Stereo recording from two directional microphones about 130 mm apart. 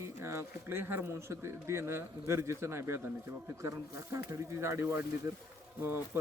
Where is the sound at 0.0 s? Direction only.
20° right (ahead or behind).